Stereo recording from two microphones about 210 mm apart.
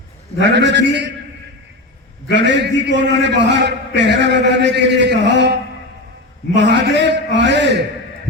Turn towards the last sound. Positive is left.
turn(degrees=-55)  # may be behind; listen again after turning